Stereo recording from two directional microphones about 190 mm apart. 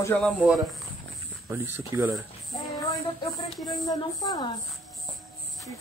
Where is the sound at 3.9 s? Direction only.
20° left (ahead or behind).